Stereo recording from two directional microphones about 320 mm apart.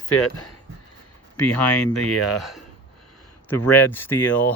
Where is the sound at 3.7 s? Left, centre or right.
Centre.